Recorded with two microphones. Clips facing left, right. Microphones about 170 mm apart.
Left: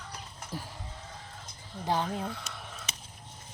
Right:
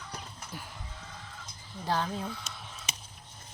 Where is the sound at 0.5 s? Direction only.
35° left (ahead or behind).